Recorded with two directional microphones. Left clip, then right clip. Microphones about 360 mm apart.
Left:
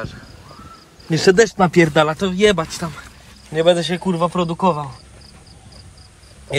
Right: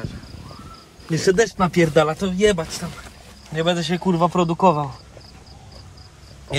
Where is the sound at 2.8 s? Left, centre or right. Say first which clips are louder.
Left 6 dB; left.